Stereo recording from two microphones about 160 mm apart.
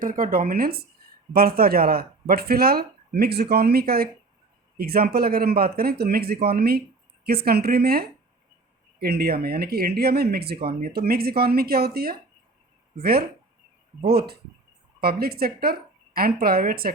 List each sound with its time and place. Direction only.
0.0 s speech: 60° right (ahead or behind)